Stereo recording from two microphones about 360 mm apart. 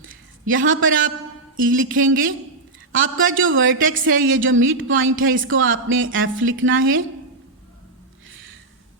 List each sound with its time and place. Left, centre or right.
0.4 s speech: right